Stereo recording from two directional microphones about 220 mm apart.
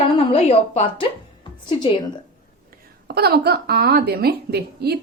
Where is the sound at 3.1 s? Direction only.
45° right (ahead or behind).